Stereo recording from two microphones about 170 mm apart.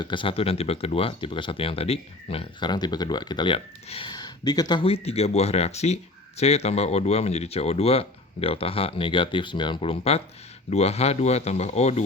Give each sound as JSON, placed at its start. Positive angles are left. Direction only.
{"t": 0.0, "sound": "speech", "side_deg": 30}